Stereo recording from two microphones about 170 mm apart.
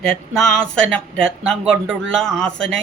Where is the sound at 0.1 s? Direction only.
5° left (ahead or behind).